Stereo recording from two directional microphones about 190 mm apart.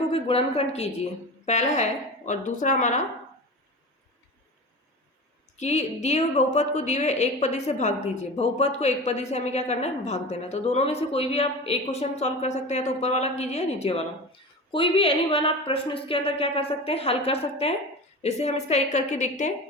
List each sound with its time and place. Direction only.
0.1 s a woman's voice: 30° left (ahead or behind)
5.5 s a woman's voice: 35° left (ahead or behind)